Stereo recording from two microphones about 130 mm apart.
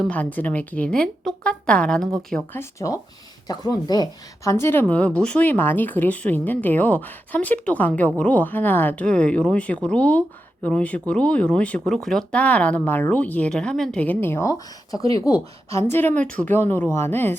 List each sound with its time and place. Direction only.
0.0 s a woman's voice: 10° left (ahead or behind)
2.5 s a woman's voice: 20° left (ahead or behind)